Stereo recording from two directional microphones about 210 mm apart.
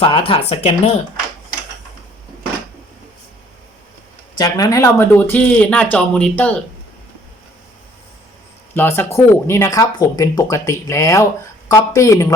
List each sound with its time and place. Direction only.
0.0 s speech: 25° left (ahead or behind)
4.4 s speech: 20° left (ahead or behind)
8.7 s speech: 10° left (ahead or behind)